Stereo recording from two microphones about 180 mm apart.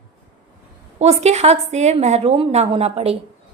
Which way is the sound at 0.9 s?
35° right (ahead or behind).